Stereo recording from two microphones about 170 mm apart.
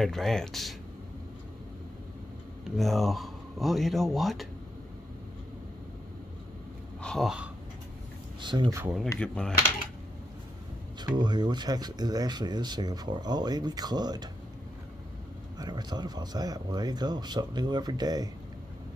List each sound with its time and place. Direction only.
0.0 s speech: centre (ahead or behind)
2.7 s speech: centre (ahead or behind)
7.0 s speech: centre (ahead or behind)
8.4 s speech: 25° right (ahead or behind)
8.9 s speech: 5° left (ahead or behind)
11.0 s speech: 25° right (ahead or behind)
15.5 s speech: 25° right (ahead or behind)